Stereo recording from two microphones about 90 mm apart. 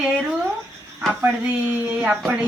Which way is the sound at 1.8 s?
15° right (ahead or behind).